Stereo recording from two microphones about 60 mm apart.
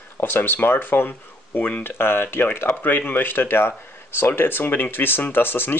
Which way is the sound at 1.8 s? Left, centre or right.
Left.